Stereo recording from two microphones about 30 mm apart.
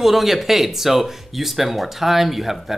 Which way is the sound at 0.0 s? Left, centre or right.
Centre.